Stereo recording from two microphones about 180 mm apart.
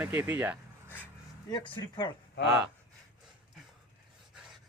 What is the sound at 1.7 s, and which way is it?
Speech, 25° left (ahead or behind).